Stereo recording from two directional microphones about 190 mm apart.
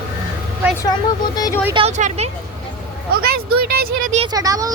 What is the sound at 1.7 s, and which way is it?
Speech, 25° right (ahead or behind).